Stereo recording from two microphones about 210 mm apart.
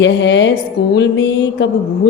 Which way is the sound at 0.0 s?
60° left (ahead or behind).